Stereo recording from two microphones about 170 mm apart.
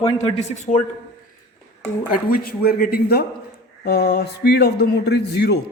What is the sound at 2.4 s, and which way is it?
A man's voice, 60° left (ahead or behind).